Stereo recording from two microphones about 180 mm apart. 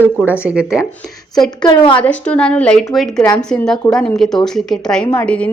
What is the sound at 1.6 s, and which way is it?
Speech, 25° left (ahead or behind).